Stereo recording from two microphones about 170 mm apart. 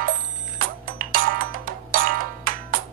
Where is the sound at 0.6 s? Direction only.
55° right (ahead or behind).